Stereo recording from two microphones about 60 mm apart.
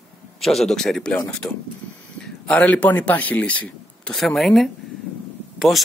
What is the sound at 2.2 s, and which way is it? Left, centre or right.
Speech, centre.